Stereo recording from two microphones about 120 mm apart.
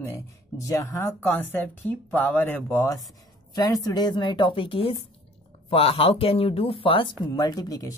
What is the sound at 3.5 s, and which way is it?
A woman's voice, 30° left (ahead or behind).